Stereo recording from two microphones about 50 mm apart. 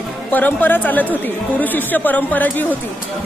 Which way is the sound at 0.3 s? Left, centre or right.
Left.